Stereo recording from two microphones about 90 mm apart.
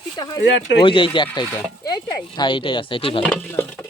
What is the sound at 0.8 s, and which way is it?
Speech, 75° left (ahead or behind).